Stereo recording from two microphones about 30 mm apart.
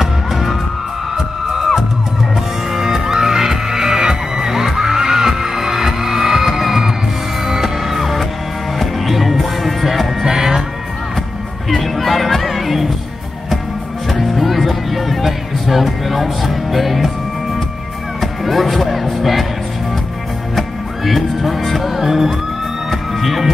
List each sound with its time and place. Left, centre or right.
0.0 s music: centre
2.7 s music: centre
10.2 s music: centre
11.7 s music: centre
14.2 s music: centre
18.2 s music: centre
20.5 s music: centre